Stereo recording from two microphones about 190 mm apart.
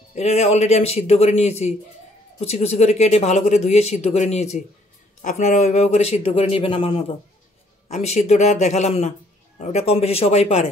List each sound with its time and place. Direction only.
0.1 s speech: 35° left (ahead or behind)